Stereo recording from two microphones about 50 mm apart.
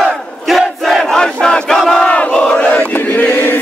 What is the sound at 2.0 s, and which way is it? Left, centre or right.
Battle cry, left.